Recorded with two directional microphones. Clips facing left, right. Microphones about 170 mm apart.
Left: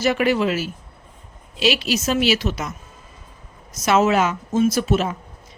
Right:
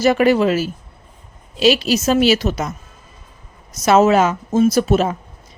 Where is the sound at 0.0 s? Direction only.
40° right (ahead or behind).